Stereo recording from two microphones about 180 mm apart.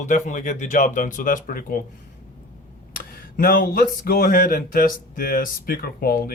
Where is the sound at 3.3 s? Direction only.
50° left (ahead or behind).